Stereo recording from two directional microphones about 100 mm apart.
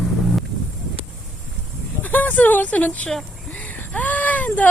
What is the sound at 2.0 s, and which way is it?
Speech, 20° left (ahead or behind).